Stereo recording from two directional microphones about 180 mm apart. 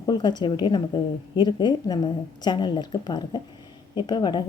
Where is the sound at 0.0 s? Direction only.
25° left (ahead or behind).